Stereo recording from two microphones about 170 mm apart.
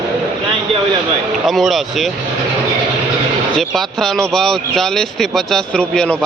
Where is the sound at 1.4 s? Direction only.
Centre (ahead or behind).